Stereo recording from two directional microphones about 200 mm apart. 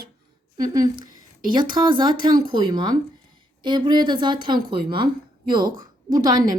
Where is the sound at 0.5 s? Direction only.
20° right (ahead or behind).